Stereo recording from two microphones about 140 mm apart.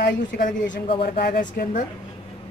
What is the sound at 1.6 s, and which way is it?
Speech, 65° left (ahead or behind).